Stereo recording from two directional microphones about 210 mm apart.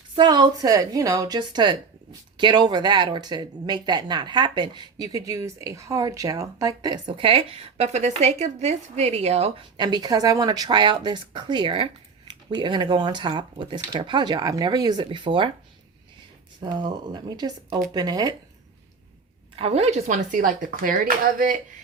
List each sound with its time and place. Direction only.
0.2 s speech: 20° right (ahead or behind)
16.6 s speech: 20° right (ahead or behind)
19.5 s speech: 30° right (ahead or behind)